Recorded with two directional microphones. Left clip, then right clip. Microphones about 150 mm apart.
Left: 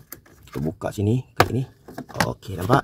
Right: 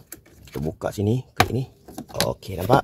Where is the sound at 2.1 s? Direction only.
15° left (ahead or behind).